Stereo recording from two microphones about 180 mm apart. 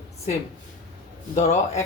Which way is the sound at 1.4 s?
40° left (ahead or behind).